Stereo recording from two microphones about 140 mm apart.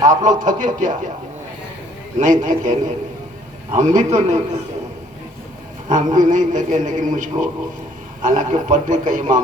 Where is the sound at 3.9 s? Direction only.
55° right (ahead or behind).